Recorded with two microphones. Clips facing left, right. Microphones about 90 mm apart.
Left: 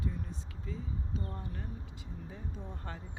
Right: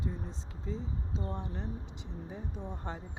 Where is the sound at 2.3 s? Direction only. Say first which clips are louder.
Right 5 dB; 20° right (ahead or behind).